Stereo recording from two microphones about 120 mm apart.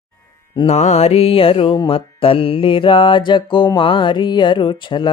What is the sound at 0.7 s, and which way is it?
Music, 70° left (ahead or behind).